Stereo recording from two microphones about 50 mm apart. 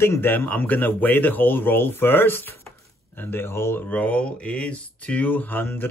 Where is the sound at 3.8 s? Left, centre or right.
Left.